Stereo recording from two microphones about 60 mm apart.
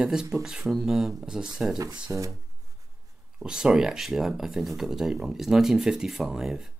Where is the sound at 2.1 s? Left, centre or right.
Right.